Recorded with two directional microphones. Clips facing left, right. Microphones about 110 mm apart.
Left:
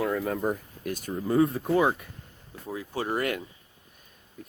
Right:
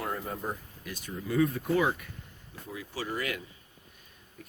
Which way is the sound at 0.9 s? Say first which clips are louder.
Left 7 dB; 50° left (ahead or behind).